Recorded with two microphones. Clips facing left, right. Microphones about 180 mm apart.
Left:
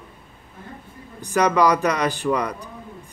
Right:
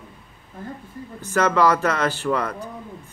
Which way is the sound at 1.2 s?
15° left (ahead or behind).